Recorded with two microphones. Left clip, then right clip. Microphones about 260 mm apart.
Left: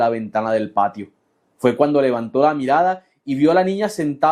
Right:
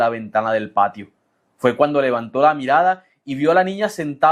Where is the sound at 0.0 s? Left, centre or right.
Right.